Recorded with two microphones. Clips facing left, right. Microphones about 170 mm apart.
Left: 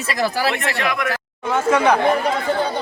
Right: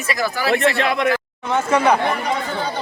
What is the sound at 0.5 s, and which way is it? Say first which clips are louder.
Speech: right 5 dB; 30° right (ahead or behind).